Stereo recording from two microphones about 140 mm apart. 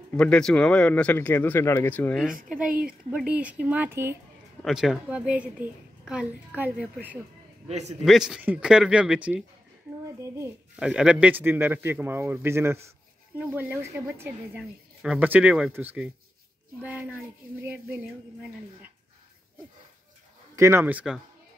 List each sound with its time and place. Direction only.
0.1 s speech: 5° left (ahead or behind)
3.2 s a woman's voice: 10° right (ahead or behind)
4.6 s a woman's voice: 5° right (ahead or behind)
7.6 s a man's voice: 50° right (ahead or behind)
8.0 s a woman's voice: centre (ahead or behind)
10.2 s a child's voice: 20° right (ahead or behind)
10.8 s a woman's voice: 5° right (ahead or behind)
20.5 s a woman's voice: 20° right (ahead or behind)